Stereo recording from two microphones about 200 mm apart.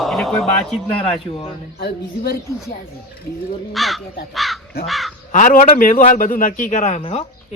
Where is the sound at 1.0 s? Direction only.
30° left (ahead or behind).